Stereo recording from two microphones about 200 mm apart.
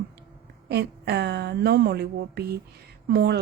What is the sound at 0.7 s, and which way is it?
Speech, 55° right (ahead or behind).